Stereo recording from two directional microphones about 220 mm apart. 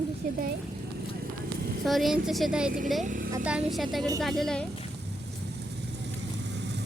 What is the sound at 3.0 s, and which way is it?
Speech, 35° right (ahead or behind).